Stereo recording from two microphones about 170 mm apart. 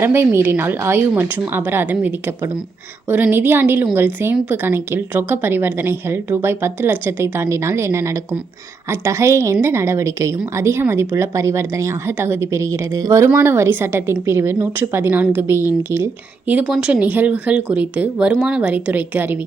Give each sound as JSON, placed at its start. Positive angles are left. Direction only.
{"t": 0.0, "sound": "a woman's voice", "side_deg": -15}